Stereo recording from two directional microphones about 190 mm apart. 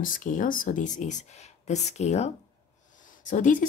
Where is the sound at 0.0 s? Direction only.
45° left (ahead or behind).